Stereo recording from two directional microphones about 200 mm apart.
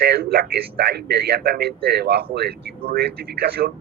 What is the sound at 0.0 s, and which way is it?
A man's voice, 50° right (ahead or behind).